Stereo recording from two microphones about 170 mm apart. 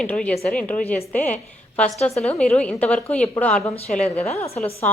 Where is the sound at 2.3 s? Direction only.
5° left (ahead or behind).